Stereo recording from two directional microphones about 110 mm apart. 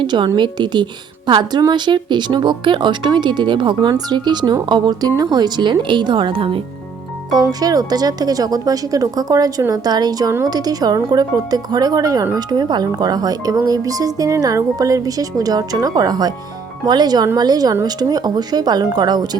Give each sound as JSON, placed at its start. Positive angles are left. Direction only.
{"t": 0.0, "sound": "a woman's voice", "side_deg": -45}
{"t": 7.3, "sound": "speech", "side_deg": -35}